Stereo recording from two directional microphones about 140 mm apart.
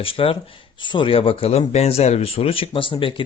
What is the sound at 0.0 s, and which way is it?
Speech, 40° left (ahead or behind).